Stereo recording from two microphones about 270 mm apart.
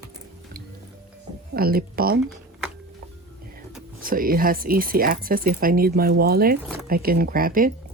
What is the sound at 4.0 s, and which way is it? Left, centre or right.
Speech, right.